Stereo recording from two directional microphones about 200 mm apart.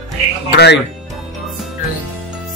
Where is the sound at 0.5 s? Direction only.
60° left (ahead or behind).